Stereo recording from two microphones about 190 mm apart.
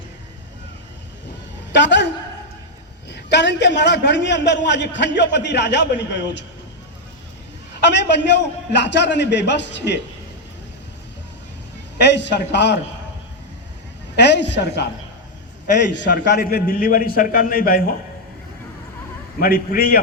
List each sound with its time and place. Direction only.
1.7 s a woman's voice: 70° left (ahead or behind)
3.1 s a man's voice: 65° left (ahead or behind)
7.9 s a man's voice: 65° left (ahead or behind)
11.9 s a man's voice: 60° left (ahead or behind)
14.2 s a man's voice: 65° left (ahead or behind)
16.0 s a man's voice: 65° left (ahead or behind); by 17.8 s 50° left (ahead or behind)
19.4 s a man's voice: 50° left (ahead or behind)